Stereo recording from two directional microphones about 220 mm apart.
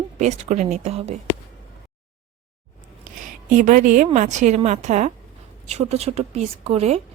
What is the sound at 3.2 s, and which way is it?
A woman's voice, 35° right (ahead or behind).